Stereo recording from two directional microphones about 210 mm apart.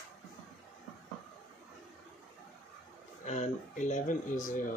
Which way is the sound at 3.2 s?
35° left (ahead or behind).